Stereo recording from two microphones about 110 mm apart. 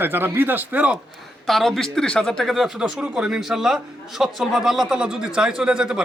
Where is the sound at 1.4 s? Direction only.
Centre (ahead or behind).